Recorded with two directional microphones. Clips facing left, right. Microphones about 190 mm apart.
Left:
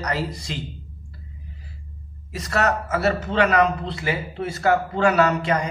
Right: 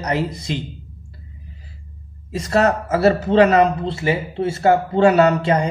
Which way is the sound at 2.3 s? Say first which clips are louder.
Right 5 dB; 30° right (ahead or behind).